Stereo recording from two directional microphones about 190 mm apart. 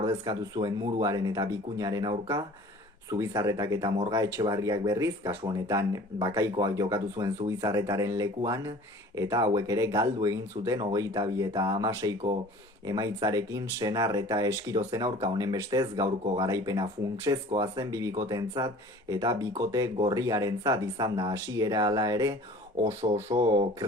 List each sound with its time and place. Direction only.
0.0 s speech: 20° right (ahead or behind)